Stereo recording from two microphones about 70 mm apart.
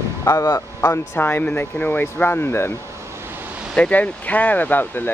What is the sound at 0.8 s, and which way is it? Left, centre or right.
Speech, left.